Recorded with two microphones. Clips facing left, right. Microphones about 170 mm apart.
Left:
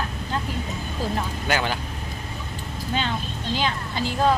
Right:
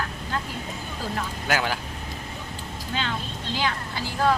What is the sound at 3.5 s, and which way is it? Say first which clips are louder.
Speech: left 2 dB; 20° left (ahead or behind).